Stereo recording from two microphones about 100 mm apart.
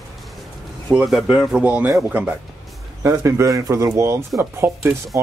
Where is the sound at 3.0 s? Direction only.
30° right (ahead or behind).